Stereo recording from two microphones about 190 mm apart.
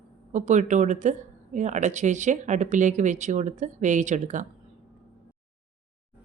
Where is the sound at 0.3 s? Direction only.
40° right (ahead or behind).